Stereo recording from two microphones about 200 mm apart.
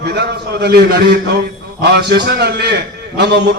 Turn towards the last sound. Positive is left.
turn(degrees=-55)  # may be behind; listen again after turning